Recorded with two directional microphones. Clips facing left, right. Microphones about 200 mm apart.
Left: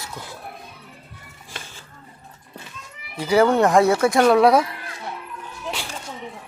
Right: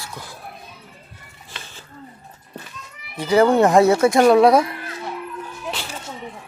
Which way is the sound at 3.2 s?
10° left (ahead or behind).